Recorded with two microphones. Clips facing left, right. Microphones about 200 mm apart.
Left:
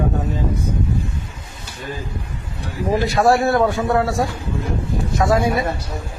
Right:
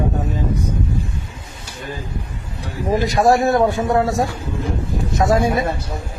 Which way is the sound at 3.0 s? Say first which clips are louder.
Right 1 dB; 15° right (ahead or behind).